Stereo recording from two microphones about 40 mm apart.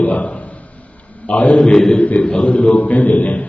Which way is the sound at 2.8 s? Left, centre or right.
Left.